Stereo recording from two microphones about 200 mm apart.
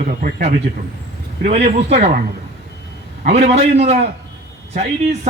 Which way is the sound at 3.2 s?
30° right (ahead or behind).